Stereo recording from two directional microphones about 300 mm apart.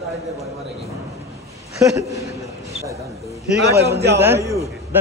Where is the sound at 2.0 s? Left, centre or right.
Centre.